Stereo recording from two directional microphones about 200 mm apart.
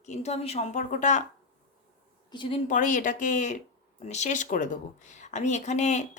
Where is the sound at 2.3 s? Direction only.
25° left (ahead or behind).